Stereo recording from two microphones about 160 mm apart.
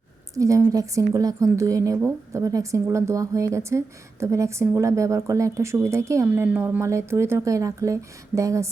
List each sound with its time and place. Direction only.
0.3 s a woman's voice: 20° right (ahead or behind)